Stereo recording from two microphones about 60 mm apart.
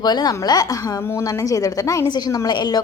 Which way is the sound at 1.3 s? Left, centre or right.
Left.